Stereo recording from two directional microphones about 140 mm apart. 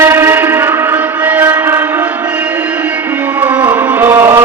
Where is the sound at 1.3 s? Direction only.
15° right (ahead or behind).